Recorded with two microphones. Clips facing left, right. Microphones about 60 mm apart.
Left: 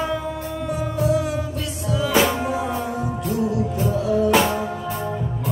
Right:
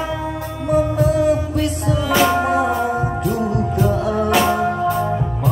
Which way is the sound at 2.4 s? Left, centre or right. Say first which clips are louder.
Right 7 dB; right.